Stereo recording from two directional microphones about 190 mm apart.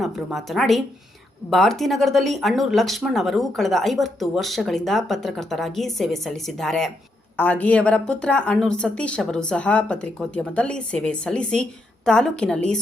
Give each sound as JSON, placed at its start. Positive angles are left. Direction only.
{"t": 0.0, "sound": "speech", "side_deg": 0}